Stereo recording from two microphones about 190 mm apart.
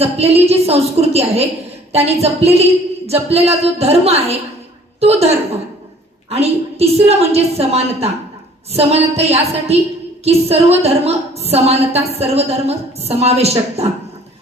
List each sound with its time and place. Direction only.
0.0 s a woman's voice: 30° right (ahead or behind)
6.3 s a woman's voice: 35° right (ahead or behind)